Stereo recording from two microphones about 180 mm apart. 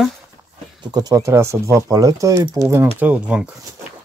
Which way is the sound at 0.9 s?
20° right (ahead or behind).